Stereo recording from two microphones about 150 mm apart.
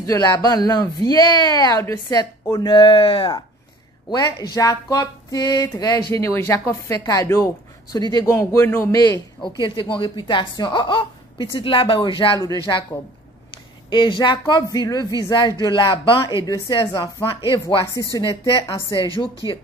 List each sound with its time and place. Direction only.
0.0 s speech: 25° left (ahead or behind)
9.6 s speech: 35° left (ahead or behind)
13.8 s speech: 30° left (ahead or behind)
19.1 s speech: 35° left (ahead or behind)